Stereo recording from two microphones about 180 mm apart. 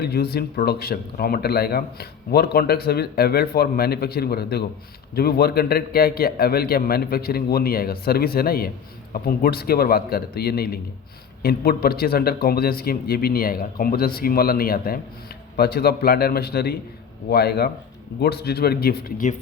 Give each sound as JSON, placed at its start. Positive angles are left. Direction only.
{"t": 0.0, "sound": "speech", "side_deg": 60}